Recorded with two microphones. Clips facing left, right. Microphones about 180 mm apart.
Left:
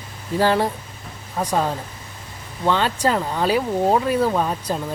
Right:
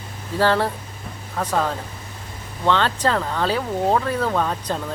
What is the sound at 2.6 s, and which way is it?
Speech, 10° left (ahead or behind).